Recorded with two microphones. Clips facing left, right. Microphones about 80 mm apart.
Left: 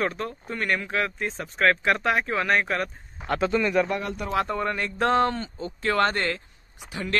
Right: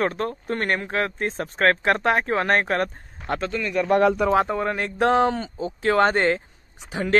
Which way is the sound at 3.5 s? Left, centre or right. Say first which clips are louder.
Left 4 dB; left.